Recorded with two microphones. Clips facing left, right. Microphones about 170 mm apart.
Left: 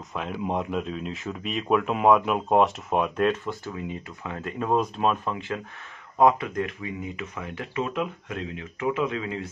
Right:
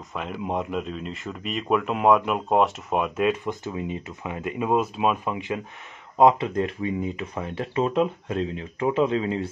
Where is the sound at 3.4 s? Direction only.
20° right (ahead or behind).